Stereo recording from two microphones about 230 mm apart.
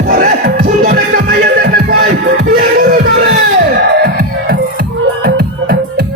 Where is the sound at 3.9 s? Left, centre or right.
Right.